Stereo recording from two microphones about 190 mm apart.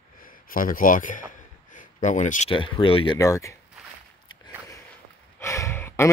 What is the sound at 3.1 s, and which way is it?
Speech, 15° left (ahead or behind).